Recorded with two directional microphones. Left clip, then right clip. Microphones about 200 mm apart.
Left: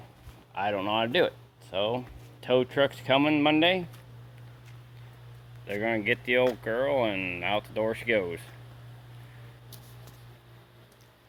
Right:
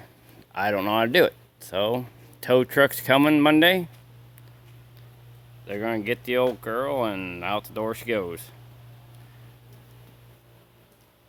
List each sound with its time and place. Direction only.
0.5 s speech: 55° right (ahead or behind)
5.6 s speech: 30° right (ahead or behind)